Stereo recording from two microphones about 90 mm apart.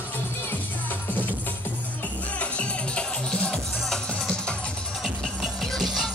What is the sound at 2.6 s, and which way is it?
Music, 10° left (ahead or behind).